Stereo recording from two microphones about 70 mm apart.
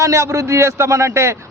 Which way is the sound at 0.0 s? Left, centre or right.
Right.